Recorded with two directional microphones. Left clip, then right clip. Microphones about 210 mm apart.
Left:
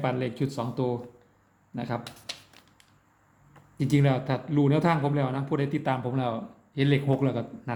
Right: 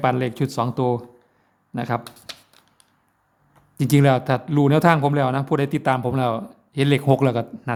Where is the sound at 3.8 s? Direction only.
40° right (ahead or behind).